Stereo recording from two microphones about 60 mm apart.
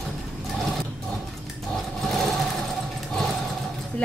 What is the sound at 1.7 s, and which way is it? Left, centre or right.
Sewing machine, centre.